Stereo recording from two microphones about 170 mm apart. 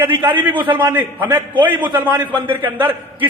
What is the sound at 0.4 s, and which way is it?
A man's voice, 10° right (ahead or behind).